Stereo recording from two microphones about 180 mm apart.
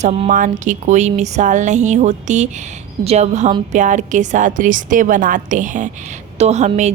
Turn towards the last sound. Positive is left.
turn(degrees=-40)  # may be behind; listen again after turning